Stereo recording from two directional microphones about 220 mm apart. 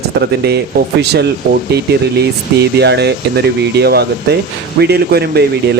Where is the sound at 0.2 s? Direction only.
50° right (ahead or behind).